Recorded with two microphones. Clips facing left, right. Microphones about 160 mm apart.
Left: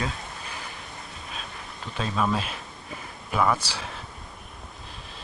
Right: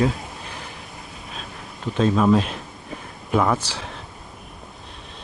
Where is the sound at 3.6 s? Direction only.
10° left (ahead or behind).